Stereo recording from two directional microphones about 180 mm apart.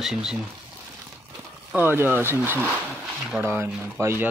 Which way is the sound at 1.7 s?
10° right (ahead or behind).